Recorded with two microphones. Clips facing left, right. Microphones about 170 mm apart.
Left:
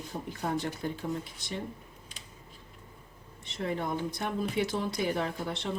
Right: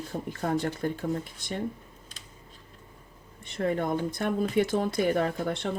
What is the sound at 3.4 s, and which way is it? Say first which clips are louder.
Speech: right 5 dB; 50° right (ahead or behind).